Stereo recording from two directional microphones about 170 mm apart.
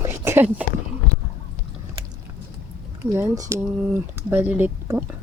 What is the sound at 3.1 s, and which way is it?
Speech, 15° right (ahead or behind).